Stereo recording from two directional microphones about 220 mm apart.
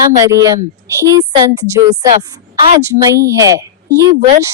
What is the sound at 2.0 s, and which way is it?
Speech, 30° right (ahead or behind).